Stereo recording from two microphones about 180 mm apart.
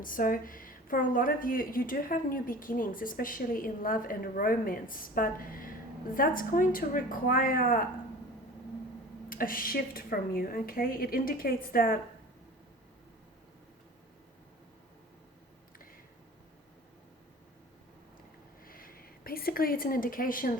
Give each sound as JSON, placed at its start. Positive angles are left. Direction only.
{"t": 0.0, "sound": "a woman's voice", "side_deg": 50}
{"t": 9.3, "sound": "a woman's voice", "side_deg": 50}
{"t": 18.6, "sound": "a sound", "side_deg": 55}